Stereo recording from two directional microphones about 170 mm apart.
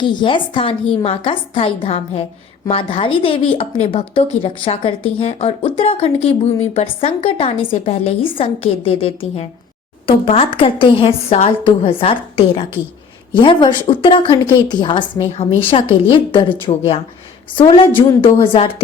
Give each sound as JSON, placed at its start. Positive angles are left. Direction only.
{"t": 0.0, "sound": "speech", "side_deg": 25}